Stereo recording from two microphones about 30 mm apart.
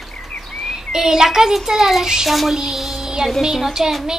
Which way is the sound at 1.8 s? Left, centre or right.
Centre.